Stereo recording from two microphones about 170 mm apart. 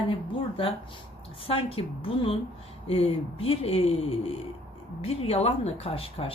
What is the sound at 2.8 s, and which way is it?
Speech, 35° left (ahead or behind).